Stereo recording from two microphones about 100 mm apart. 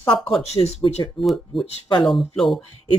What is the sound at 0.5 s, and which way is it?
Speech, 85° left.